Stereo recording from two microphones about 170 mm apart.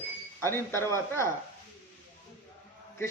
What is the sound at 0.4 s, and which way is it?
Speech, 15° left (ahead or behind).